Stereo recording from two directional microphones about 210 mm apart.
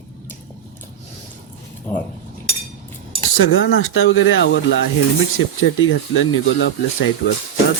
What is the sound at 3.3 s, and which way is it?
Speech, 75° left (ahead or behind).